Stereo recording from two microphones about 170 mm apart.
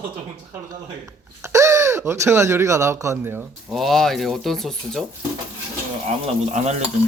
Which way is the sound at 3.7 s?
Centre (ahead or behind).